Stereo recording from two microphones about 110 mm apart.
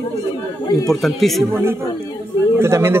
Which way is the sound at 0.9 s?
Centre (ahead or behind).